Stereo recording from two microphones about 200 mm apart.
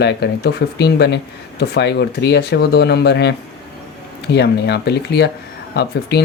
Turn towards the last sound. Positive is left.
turn(degrees=55)  # may be behind; listen again after turning